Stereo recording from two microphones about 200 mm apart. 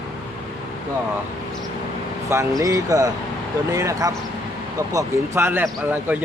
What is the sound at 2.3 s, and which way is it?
Speech, 15° right (ahead or behind).